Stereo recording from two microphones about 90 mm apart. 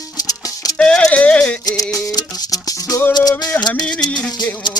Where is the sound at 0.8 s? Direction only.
10° left (ahead or behind).